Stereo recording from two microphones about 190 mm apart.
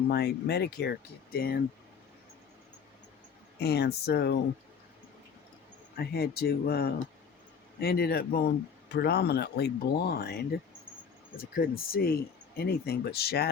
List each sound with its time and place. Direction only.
0.1 s speech: 55° left (ahead or behind)
3.6 s speech: 60° left (ahead or behind)
6.0 s speech: 55° left (ahead or behind)